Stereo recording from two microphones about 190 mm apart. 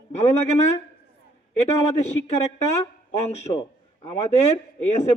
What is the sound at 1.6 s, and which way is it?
A man's voice, 35° left (ahead or behind).